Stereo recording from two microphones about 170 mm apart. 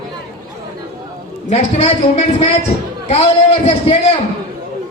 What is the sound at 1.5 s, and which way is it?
Speech, 40° left (ahead or behind).